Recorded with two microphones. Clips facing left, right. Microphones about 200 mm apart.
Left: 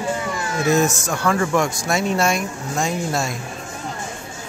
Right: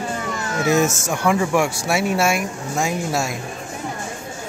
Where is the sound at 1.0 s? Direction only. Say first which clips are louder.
Right 1 dB; 15° right (ahead or behind).